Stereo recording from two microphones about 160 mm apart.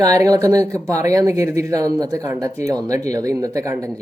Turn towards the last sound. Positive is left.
turn(degrees=-20)  # may be behind; listen again after turning